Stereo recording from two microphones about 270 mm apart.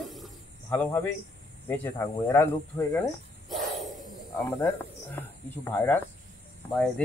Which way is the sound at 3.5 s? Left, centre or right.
Centre.